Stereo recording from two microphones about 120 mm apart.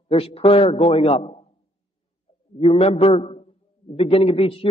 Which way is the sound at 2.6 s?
55° left (ahead or behind).